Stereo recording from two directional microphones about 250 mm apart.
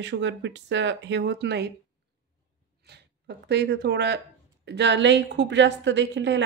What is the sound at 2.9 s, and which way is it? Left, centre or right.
Speech, right.